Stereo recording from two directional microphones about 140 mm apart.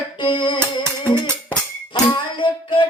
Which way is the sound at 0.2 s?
35° left (ahead or behind).